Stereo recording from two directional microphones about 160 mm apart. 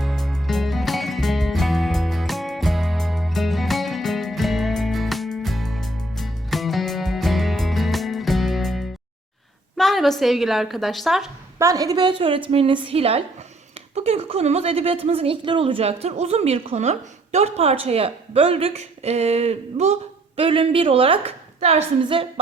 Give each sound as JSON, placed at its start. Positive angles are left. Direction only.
{"t": 0.0, "sound": "music", "side_deg": 0}
{"t": 9.7, "sound": "a woman's voice", "side_deg": 0}
{"t": 11.6, "sound": "a woman's voice", "side_deg": -20}